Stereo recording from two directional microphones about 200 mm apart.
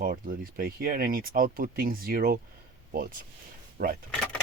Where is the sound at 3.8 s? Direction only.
45° right (ahead or behind).